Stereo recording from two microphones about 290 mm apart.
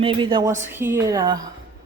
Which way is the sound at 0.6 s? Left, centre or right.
Centre.